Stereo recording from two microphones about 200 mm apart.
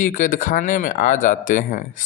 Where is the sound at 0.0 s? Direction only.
40° left (ahead or behind).